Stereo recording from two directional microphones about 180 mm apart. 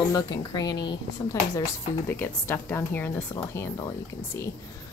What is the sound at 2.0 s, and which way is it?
A woman's voice, 10° left (ahead or behind).